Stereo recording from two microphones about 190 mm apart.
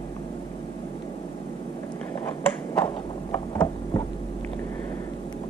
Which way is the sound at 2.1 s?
10° left (ahead or behind).